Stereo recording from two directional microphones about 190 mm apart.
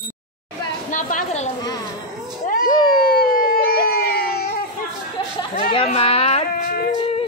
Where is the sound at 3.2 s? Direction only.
50° left (ahead or behind).